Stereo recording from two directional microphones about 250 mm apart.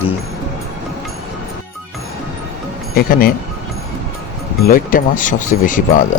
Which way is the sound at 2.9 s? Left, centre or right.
Left.